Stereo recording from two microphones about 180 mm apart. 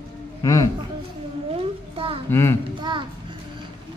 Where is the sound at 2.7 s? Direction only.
25° right (ahead or behind).